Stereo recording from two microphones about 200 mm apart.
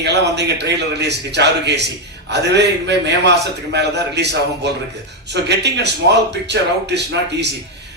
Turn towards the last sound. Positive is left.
turn(degrees=-60)  # may be behind; listen again after turning